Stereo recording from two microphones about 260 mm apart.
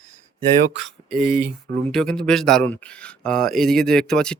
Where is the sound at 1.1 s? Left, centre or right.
Centre.